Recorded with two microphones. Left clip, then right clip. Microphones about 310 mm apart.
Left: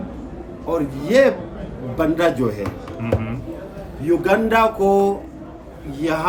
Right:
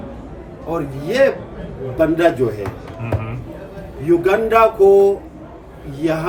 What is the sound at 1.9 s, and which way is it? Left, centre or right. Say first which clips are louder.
Speech: right 3 dB; centre.